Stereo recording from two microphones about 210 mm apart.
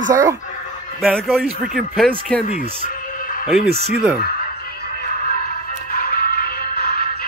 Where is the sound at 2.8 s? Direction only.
40° left (ahead or behind).